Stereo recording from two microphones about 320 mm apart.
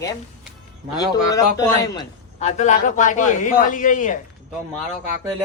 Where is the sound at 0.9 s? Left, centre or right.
Centre.